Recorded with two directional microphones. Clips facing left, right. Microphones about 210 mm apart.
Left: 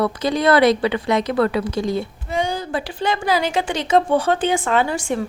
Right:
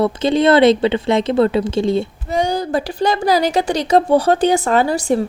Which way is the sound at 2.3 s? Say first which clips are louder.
Right 5 dB; 40° right (ahead or behind).